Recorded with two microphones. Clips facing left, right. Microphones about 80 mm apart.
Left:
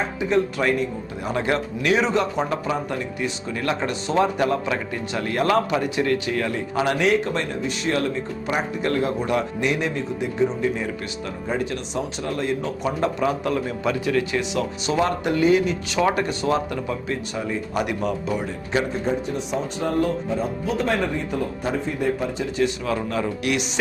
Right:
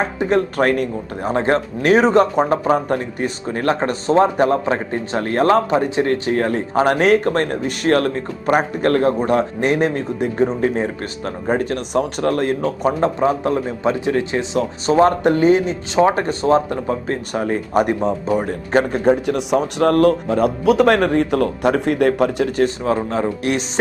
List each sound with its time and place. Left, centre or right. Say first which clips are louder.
0.0 s speech: right 4 dB; right
1.2 s speech: right 6 dB; right
22.6 s speech: right 2 dB; right